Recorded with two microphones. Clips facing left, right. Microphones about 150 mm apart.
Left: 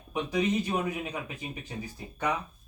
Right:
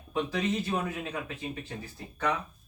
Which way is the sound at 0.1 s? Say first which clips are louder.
Left 2 dB; 15° left (ahead or behind).